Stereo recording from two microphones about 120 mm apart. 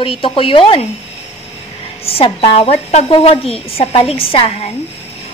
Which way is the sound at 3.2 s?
50° left (ahead or behind).